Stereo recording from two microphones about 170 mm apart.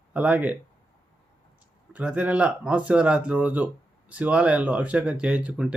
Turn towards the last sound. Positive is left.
turn(degrees=-5)  # may be behind; listen again after turning